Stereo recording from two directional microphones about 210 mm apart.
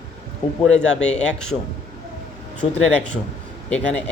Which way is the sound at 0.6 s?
5° left (ahead or behind).